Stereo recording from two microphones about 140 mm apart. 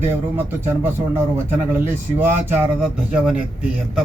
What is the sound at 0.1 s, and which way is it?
A man's voice, 15° right (ahead or behind).